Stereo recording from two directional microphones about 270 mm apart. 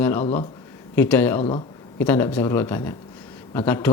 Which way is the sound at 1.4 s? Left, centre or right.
Left.